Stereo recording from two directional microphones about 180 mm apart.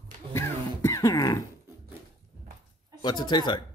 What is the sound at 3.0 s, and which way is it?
Speech, 25° left (ahead or behind).